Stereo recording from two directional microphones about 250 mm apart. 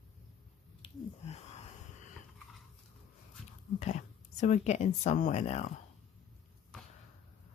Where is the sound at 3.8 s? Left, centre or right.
Left.